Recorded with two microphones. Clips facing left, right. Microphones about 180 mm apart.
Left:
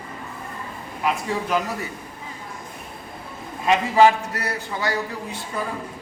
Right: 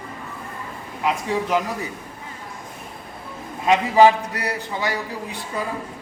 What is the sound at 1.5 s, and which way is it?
Speech, 15° right (ahead or behind).